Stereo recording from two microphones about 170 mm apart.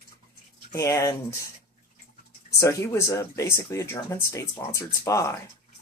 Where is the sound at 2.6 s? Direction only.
15° left (ahead or behind).